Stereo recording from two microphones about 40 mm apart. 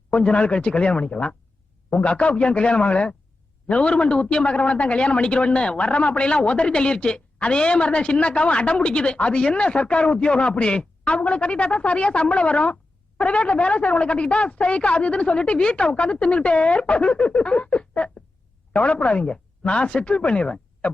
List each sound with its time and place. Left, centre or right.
0.1 s a man's voice: left